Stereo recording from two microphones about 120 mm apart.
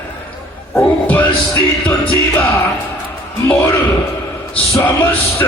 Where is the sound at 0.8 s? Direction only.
15° left (ahead or behind).